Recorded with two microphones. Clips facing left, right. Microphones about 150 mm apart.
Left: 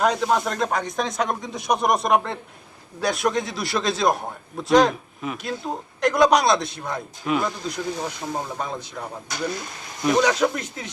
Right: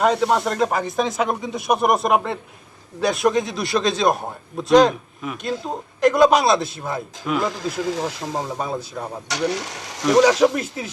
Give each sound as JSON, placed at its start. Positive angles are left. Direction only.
{"t": 0.0, "sound": "a man's voice", "side_deg": 0}
{"t": 7.5, "sound": "speech", "side_deg": -90}
{"t": 8.4, "sound": "speech", "side_deg": -15}
{"t": 9.3, "sound": "speech", "side_deg": -80}
{"t": 10.5, "sound": "speech", "side_deg": -5}